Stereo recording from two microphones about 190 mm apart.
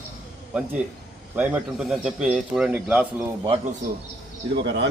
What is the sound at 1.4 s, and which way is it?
A man's voice, 10° right (ahead or behind).